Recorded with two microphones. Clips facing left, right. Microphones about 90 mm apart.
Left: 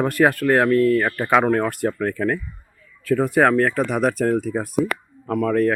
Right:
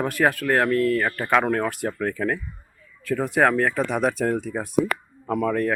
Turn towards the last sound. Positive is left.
turn(degrees=0)  # may be behind; listen again after turning